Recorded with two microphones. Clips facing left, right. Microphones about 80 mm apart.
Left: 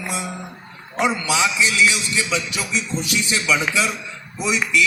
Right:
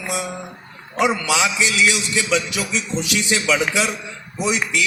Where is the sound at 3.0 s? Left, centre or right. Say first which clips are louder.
Right 2 dB; right.